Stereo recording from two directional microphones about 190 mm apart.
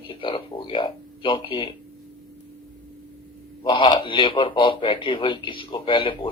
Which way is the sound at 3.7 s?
25° left (ahead or behind).